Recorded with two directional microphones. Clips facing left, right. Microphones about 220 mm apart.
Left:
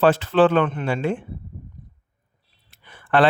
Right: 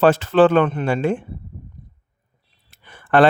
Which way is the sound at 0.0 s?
45° right (ahead or behind).